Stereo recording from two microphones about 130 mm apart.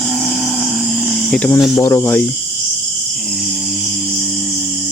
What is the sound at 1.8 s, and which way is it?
Speech, 20° left (ahead or behind).